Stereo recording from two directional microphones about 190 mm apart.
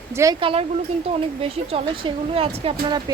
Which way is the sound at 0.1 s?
15° right (ahead or behind).